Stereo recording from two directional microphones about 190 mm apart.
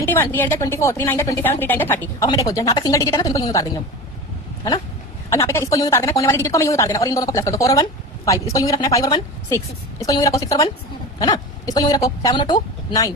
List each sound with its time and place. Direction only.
0.0 s a woman's voice: 10° left (ahead or behind)
5.3 s a woman's voice: 15° left (ahead or behind)